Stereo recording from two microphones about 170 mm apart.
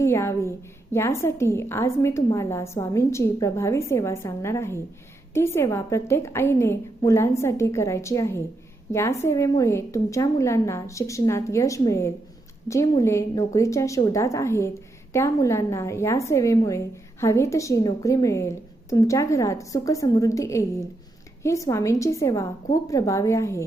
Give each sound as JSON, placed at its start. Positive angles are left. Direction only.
{"t": 0.0, "sound": "a woman's voice", "side_deg": 15}